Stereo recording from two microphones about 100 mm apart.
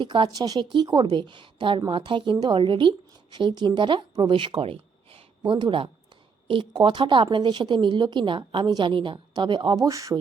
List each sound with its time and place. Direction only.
0.0 s a woman's voice: 50° right (ahead or behind)
0.6 s a woman's voice: 55° right (ahead or behind)
4.6 s a sound: 70° right (ahead or behind); by 5.9 s 55° right (ahead or behind)
6.5 s a woman's voice: 55° right (ahead or behind)
9.7 s speech: 35° right (ahead or behind)